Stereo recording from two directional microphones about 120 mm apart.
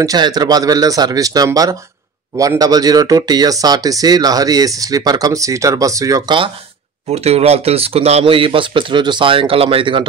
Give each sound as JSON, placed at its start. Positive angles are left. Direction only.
{"t": 0.0, "sound": "speech", "side_deg": -30}
{"t": 7.1, "sound": "speech", "side_deg": -60}